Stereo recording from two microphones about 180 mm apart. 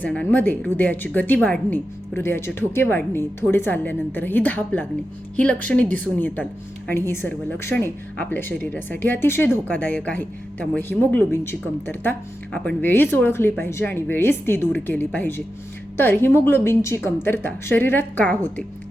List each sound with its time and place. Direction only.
0.0 s speech: 5° left (ahead or behind)